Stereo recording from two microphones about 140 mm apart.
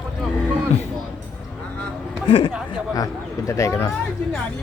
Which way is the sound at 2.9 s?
25° left (ahead or behind).